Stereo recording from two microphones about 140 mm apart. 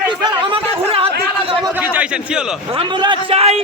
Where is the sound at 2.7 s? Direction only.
35° right (ahead or behind).